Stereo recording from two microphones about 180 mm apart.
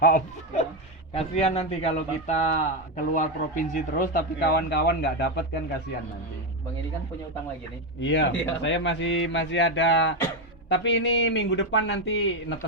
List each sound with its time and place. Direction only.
0.0 s a man's voice: 50° left (ahead or behind)
1.1 s a man's voice: 35° left (ahead or behind); by 5.3 s 65° left (ahead or behind)
8.0 s speech: 85° left